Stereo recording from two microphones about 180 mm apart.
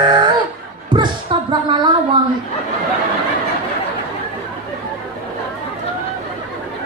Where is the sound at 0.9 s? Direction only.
25° right (ahead or behind).